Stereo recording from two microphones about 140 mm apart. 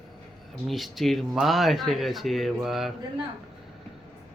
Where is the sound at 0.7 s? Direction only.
Centre (ahead or behind).